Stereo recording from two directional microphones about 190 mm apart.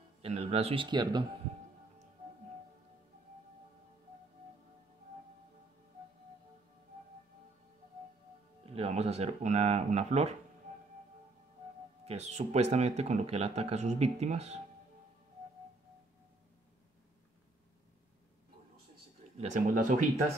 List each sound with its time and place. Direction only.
0.2 s speech: 30° right (ahead or behind)
8.6 s speech: 30° right (ahead or behind)
12.0 s speech: 35° right (ahead or behind)
19.3 s speech: 40° right (ahead or behind)